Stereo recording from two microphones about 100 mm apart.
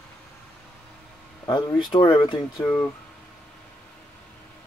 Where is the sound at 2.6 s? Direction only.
25° left (ahead or behind).